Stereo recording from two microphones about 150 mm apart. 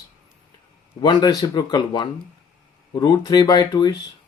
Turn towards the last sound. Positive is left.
turn(degrees=30)  # may be behind; listen again after turning